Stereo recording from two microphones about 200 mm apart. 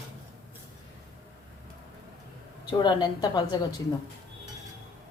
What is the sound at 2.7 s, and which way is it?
Speech, 20° left (ahead or behind).